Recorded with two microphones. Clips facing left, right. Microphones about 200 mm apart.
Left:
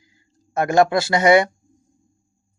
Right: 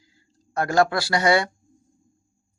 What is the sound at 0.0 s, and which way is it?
Speech, 20° left (ahead or behind).